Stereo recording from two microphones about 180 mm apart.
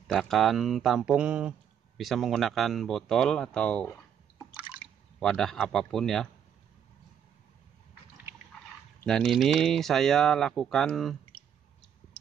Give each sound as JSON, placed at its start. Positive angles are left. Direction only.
{"t": 0.1, "sound": "speech", "side_deg": 0}
{"t": 5.2, "sound": "speech", "side_deg": 5}
{"t": 9.0, "sound": "speech", "side_deg": 5}